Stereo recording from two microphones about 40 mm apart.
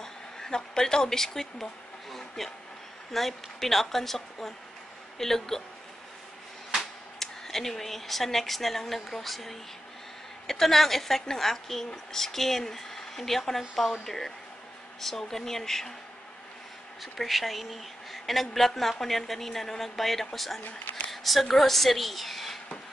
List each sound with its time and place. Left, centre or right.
0.0 s a sound: centre
3.1 s speech: centre
7.2 s a woman's voice: centre
17.0 s a woman's voice: centre
20.9 s a sound: centre
21.5 s a woman's voice: centre